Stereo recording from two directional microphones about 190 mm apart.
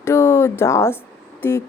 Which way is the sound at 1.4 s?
15° left (ahead or behind).